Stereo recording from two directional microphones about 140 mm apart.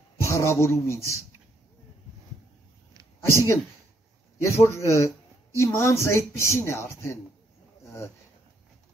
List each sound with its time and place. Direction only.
0.2 s speech: 20° left (ahead or behind)
3.3 s speech: 20° left (ahead or behind)